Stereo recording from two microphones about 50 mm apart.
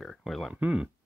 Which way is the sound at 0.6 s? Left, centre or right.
Right.